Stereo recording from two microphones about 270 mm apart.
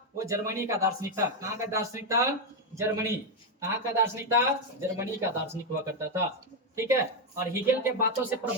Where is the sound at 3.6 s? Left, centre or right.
Centre.